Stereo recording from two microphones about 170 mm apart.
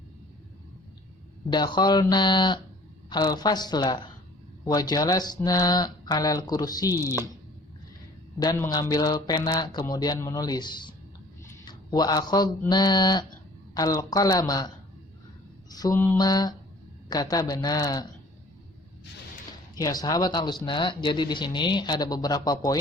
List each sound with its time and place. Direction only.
1.5 s speech: 25° left (ahead or behind)
8.4 s speech: 20° left (ahead or behind)
15.7 s speech: 20° left (ahead or behind)
19.8 s speech: 20° left (ahead or behind)